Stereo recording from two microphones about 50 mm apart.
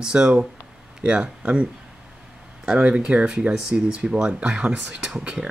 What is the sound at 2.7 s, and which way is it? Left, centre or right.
Speech, right.